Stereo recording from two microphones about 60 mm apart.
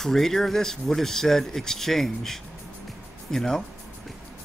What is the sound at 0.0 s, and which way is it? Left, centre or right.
Speech, centre.